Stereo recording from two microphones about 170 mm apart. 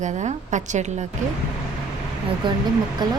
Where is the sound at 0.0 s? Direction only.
45° right (ahead or behind).